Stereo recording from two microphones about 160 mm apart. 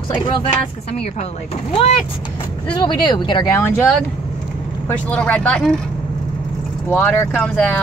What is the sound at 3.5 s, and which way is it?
Speech, 15° left (ahead or behind).